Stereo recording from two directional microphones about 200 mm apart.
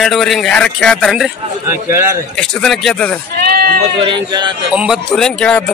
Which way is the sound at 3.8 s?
25° right (ahead or behind).